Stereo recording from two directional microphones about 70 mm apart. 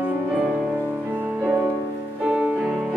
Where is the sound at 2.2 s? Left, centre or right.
Centre.